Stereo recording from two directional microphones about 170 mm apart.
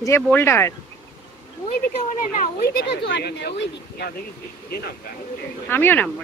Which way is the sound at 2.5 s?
70° left (ahead or behind).